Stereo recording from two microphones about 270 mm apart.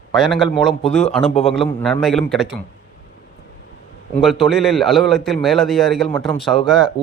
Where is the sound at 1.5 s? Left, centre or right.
Centre.